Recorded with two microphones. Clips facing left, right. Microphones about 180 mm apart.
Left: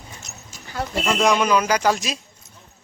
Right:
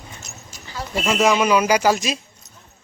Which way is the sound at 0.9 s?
5° right (ahead or behind).